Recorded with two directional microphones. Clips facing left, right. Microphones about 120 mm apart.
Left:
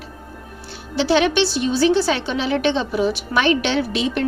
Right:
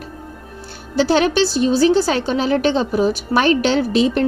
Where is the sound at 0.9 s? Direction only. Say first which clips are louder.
Right 2 dB; 40° right (ahead or behind).